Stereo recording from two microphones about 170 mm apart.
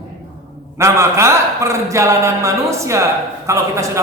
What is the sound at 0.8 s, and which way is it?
A man's voice, 15° right (ahead or behind).